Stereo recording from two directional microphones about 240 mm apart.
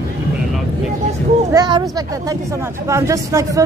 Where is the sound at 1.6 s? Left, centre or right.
Centre.